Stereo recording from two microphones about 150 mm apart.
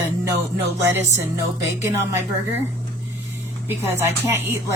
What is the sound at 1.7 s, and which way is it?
Speech, 15° right (ahead or behind).